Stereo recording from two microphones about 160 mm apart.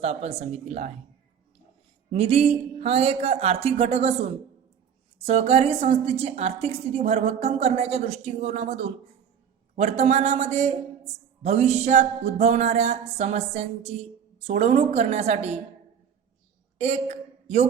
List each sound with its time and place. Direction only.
0.0 s music: 40° right (ahead or behind)
2.0 s a woman's voice: 40° right (ahead or behind)
9.7 s music: 45° right (ahead or behind)
16.7 s a woman's voice: 45° right (ahead or behind)